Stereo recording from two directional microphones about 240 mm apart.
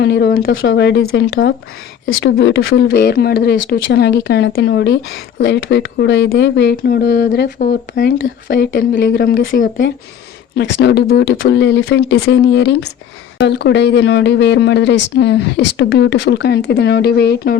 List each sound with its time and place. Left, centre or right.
0.0 s speech: left